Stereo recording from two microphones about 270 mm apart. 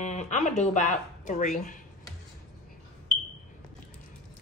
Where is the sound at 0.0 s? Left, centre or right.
Left.